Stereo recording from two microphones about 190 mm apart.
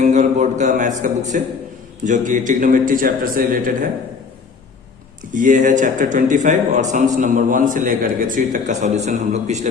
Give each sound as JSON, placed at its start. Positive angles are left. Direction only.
{"t": 0.0, "sound": "a man's voice", "side_deg": -35}
{"t": 5.2, "sound": "speech", "side_deg": -45}